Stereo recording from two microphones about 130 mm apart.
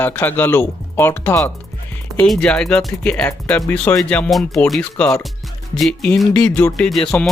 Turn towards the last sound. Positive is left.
turn(degrees=5)  # may be behind; listen again after turning